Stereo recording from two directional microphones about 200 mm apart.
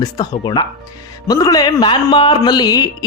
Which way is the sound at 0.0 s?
20° left (ahead or behind).